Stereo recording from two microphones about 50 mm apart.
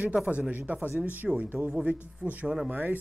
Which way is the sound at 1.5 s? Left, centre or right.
Right.